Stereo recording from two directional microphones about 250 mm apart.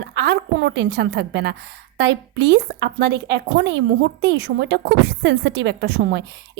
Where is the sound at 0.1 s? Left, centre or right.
Right.